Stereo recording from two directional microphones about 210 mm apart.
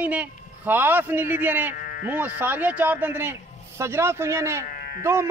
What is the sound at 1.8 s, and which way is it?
Sheep, 45° left (ahead or behind).